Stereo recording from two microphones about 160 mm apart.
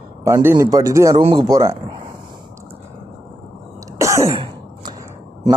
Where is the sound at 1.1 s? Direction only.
35° right (ahead or behind).